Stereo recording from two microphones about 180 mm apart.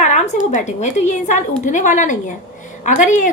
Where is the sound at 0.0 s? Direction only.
40° left (ahead or behind).